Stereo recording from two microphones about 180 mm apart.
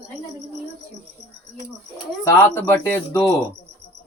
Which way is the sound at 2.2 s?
15° left (ahead or behind).